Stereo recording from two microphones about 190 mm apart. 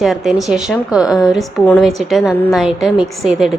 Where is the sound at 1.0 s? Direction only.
20° left (ahead or behind).